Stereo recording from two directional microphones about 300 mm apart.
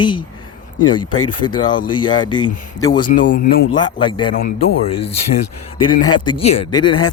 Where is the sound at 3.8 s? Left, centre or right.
Centre.